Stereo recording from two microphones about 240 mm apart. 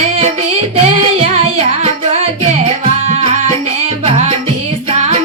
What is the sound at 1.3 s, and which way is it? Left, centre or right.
Music, right.